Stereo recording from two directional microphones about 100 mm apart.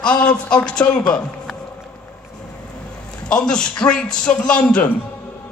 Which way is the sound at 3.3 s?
10° left (ahead or behind).